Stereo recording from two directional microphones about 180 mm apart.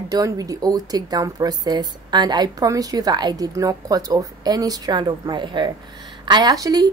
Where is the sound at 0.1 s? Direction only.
20° right (ahead or behind).